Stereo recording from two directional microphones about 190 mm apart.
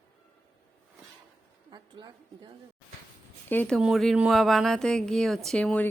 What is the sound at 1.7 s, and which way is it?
Speech, 25° right (ahead or behind).